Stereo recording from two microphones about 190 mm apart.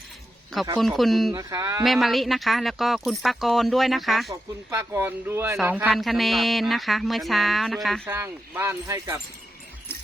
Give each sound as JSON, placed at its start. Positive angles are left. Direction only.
{"t": 0.8, "sound": "speech", "side_deg": 0}
{"t": 1.3, "sound": "speech", "side_deg": -20}
{"t": 1.8, "sound": "speech", "side_deg": 0}
{"t": 4.3, "sound": "speech", "side_deg": -15}
{"t": 8.0, "sound": "speech", "side_deg": -10}